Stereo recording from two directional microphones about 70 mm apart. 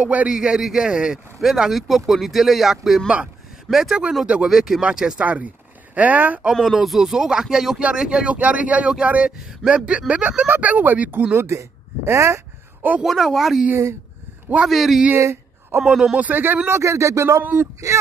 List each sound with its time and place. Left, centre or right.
0.0 s speech: centre
6.5 s speech: centre; by 11.2 s right
11.3 s speech: right
13.0 s speech: centre
16.3 s speech: right
17.4 s speech: right